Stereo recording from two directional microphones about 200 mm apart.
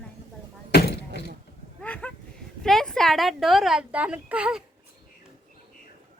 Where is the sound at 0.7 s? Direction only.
55° left (ahead or behind).